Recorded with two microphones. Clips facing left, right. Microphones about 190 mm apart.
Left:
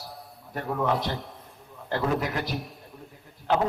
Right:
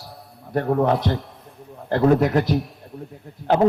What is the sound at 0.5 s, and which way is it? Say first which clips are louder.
Speech: right 10 dB; 60° right (ahead or behind).